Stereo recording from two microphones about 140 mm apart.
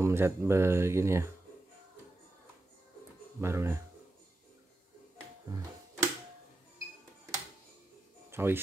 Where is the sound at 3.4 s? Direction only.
20° right (ahead or behind).